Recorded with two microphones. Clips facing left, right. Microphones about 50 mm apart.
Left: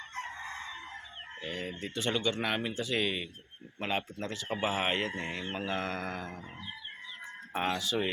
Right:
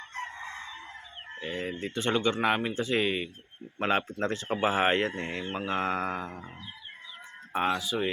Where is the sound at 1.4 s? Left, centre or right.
Right.